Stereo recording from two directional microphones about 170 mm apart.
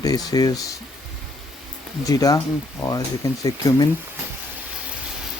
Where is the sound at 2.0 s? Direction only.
20° left (ahead or behind).